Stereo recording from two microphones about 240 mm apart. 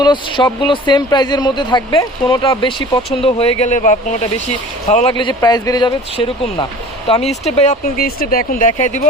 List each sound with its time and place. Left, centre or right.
0.0 s speech: centre
5.1 s speech: centre; by 8.9 s left